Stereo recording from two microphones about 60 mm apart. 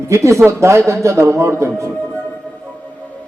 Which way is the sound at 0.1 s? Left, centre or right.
Right.